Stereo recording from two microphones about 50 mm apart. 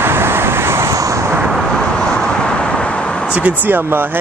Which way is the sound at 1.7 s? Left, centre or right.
Centre.